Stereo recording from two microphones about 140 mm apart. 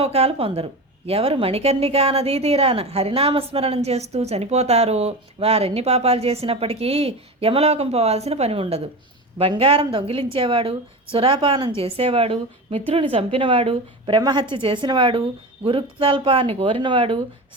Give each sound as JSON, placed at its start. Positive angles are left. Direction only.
{"t": 0.0, "sound": "a woman's voice", "side_deg": -45}
{"t": 14.2, "sound": "a woman's voice", "side_deg": -30}